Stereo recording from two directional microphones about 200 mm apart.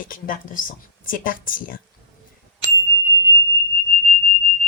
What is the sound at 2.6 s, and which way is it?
Ding, 20° left (ahead or behind).